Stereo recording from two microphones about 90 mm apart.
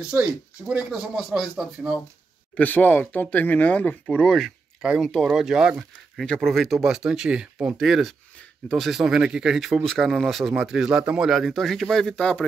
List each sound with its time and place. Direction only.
0.0 s speech: 15° right (ahead or behind)
0.9 s speech: 5° right (ahead or behind)
2.5 s speech: 15° left (ahead or behind)
4.8 s speech: 10° right (ahead or behind)
6.1 s speech: 5° left (ahead or behind)